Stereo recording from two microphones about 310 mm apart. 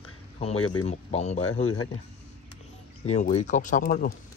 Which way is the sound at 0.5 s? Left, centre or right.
Left.